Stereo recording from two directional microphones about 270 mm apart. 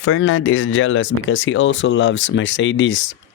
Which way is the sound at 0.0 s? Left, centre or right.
Left.